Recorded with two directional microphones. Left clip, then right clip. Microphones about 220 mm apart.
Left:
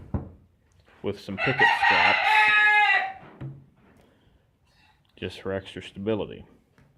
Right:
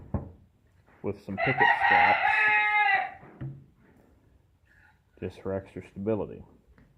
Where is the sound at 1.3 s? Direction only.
10° left (ahead or behind).